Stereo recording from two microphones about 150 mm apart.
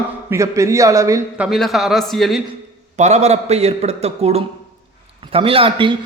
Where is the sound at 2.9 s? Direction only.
50° right (ahead or behind).